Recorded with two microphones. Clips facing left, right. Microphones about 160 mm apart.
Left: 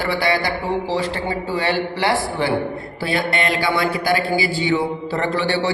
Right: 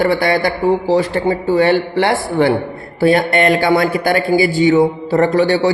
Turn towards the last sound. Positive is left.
turn(degrees=-45)  # may be behind; listen again after turning